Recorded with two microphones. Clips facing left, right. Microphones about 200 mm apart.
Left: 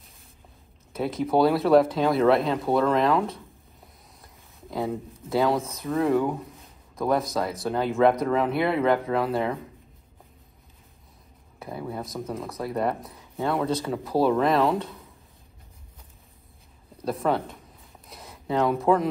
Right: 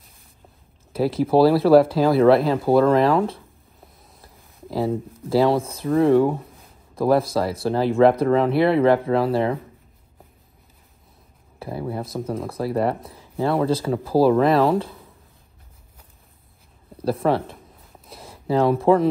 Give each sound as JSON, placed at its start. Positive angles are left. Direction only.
{"t": 0.9, "sound": "speech", "side_deg": -30}
{"t": 4.2, "sound": "a sound", "side_deg": 0}
{"t": 4.7, "sound": "speech", "side_deg": -30}
{"t": 11.6, "sound": "speech", "side_deg": -30}
{"t": 14.1, "sound": "speech", "side_deg": 0}
{"t": 17.0, "sound": "speech", "side_deg": -30}
{"t": 18.1, "sound": "a sound", "side_deg": -30}